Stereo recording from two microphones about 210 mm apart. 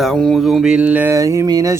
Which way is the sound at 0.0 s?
Centre (ahead or behind).